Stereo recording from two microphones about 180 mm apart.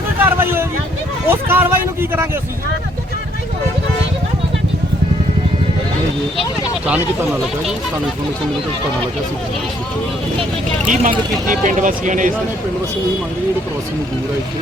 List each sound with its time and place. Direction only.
0.2 s vehicle: 10° right (ahead or behind)
1.3 s a sound: 10° right (ahead or behind)
10.8 s speech: 45° right (ahead or behind)